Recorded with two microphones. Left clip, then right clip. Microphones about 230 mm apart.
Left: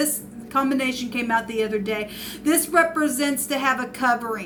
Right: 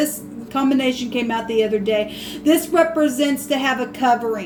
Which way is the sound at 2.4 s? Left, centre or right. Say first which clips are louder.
Right 3 dB; left.